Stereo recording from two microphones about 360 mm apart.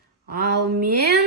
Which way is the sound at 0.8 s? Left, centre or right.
Right.